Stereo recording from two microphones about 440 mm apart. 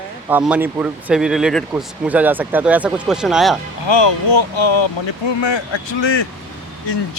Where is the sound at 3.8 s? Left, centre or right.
Left.